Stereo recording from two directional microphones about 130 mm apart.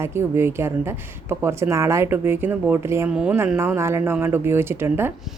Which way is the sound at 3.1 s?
5° right (ahead or behind).